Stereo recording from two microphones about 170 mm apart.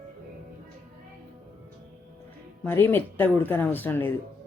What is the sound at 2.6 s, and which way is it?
Speech, 10° left (ahead or behind).